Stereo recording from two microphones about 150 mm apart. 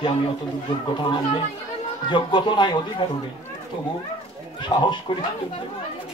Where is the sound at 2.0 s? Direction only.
30° left (ahead or behind).